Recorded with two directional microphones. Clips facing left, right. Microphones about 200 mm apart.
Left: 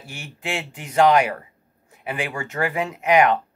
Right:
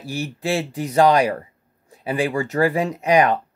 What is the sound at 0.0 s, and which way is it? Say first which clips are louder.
Speech: right 8 dB; 35° right (ahead or behind).